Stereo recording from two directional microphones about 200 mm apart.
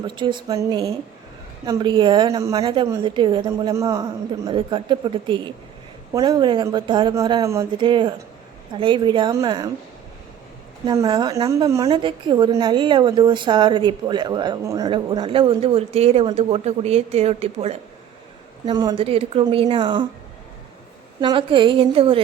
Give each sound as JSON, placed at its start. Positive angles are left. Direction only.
{"t": 0.0, "sound": "a woman's voice", "side_deg": -20}
{"t": 10.8, "sound": "a woman's voice", "side_deg": -20}
{"t": 18.7, "sound": "a woman's voice", "side_deg": -20}
{"t": 21.2, "sound": "a woman's voice", "side_deg": -25}